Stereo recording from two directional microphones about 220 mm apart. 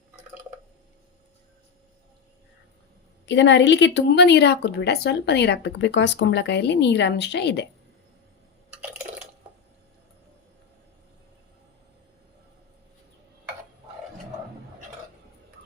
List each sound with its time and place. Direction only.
3.2 s a woman's voice: 55° left (ahead or behind)
8.7 s water: 5° right (ahead or behind)